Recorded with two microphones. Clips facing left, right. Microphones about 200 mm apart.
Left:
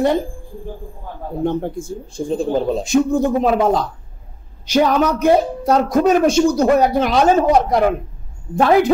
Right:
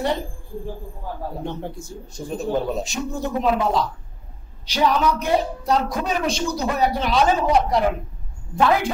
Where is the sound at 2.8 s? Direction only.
50° left (ahead or behind).